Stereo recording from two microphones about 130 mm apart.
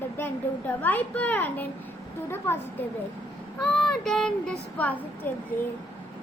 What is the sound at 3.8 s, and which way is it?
Speech, 5° left (ahead or behind).